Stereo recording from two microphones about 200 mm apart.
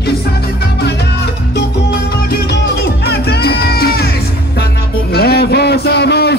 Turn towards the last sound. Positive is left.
turn(degrees=55)  # may be behind; listen again after turning